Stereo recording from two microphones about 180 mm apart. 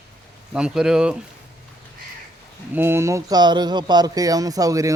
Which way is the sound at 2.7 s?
10° right (ahead or behind).